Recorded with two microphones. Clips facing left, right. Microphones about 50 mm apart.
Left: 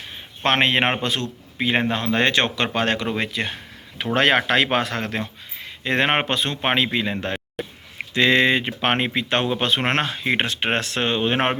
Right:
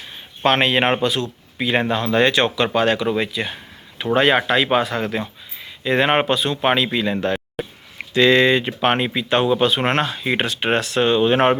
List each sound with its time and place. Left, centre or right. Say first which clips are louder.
0.4 s speech: right 2 dB; left
1.5 s speech: right 2 dB; left
3.9 s speech: right 2 dB; left
5.8 s speech: right 3 dB; left
6.6 s speech: right 3 dB; left